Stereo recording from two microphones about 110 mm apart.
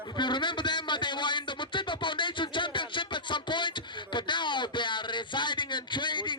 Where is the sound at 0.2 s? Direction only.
45° left (ahead or behind).